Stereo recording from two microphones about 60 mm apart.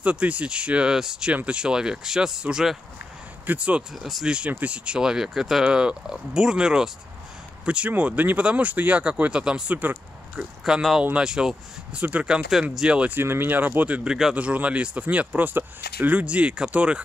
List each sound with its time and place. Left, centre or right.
0.0 s speech: right
3.4 s speech: centre
3.9 s speech: centre
4.5 s speech: right
7.9 s speech: right; by 12.0 s centre
12.0 s speech: right
12.3 s speech: centre
13.1 s speech: right
14.0 s speech: centre
14.3 s speech: right